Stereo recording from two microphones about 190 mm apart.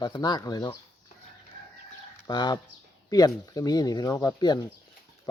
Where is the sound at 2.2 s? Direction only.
20° left (ahead or behind).